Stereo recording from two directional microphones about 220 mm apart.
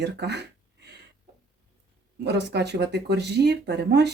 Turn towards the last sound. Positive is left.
turn(degrees=-50)  # may be behind; listen again after turning